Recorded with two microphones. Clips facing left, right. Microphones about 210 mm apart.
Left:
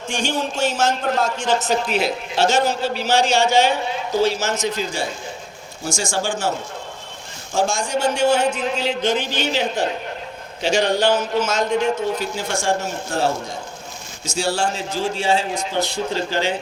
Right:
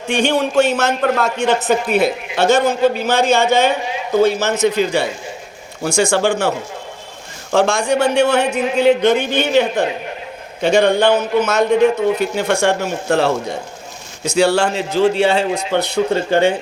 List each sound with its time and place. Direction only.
0.1 s a man's voice: 65° right (ahead or behind)
7.5 s a man's voice: 65° right (ahead or behind)